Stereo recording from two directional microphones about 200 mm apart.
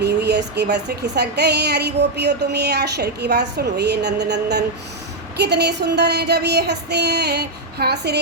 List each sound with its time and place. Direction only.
0.0 s speech: 55° right (ahead or behind)